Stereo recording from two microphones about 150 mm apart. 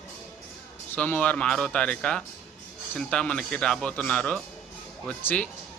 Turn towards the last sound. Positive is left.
turn(degrees=10)  # may be behind; listen again after turning